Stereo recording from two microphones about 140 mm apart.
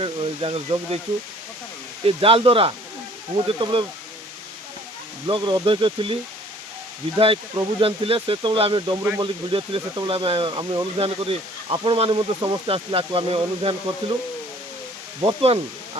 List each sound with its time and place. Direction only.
0.0 s speech: 40° right (ahead or behind)
2.0 s speech: 40° right (ahead or behind)
5.2 s speech: 35° right (ahead or behind)
7.2 s speech: 40° right (ahead or behind)
15.2 s speech: 30° right (ahead or behind)